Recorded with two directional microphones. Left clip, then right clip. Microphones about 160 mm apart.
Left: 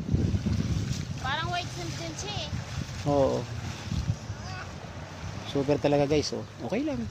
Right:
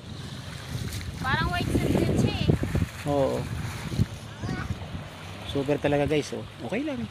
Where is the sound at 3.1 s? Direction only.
5° left (ahead or behind).